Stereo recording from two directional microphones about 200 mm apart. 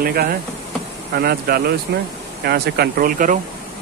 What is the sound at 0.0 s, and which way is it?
Speech, 50° right (ahead or behind).